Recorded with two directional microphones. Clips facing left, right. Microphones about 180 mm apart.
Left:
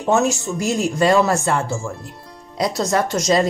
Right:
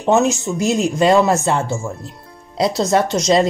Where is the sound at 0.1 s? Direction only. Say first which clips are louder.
Right 3 dB; 20° right (ahead or behind).